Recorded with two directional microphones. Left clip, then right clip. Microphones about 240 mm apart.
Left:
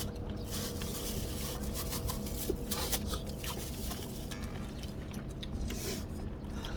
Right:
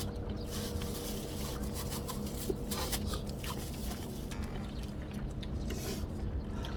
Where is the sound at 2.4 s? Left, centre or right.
Left.